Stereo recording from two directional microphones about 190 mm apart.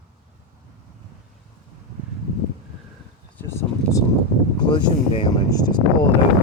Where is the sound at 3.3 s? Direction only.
10° left (ahead or behind).